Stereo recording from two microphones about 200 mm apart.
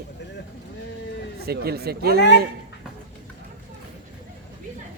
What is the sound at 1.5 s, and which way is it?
Speech, 50° right (ahead or behind).